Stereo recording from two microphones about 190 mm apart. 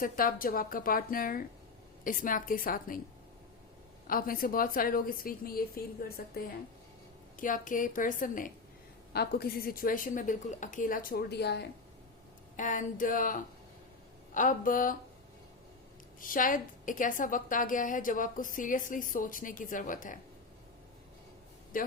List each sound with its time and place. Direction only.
0.0 s a woman's voice: 50° left (ahead or behind)
4.0 s a woman's voice: 50° left (ahead or behind)
9.1 s a woman's voice: 55° left (ahead or behind)
12.5 s a woman's voice: 40° left (ahead or behind)
16.2 s a woman's voice: 45° left (ahead or behind)
21.7 s a woman's voice: 45° left (ahead or behind)